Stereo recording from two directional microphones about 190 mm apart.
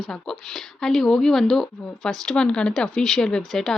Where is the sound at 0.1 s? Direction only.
5° left (ahead or behind).